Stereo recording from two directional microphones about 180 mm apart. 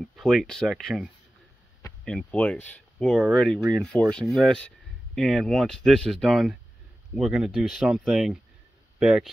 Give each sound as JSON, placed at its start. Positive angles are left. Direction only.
{"t": 0.0, "sound": "speech", "side_deg": 0}